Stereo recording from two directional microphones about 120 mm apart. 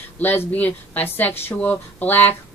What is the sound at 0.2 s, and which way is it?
A woman's voice, 15° left (ahead or behind).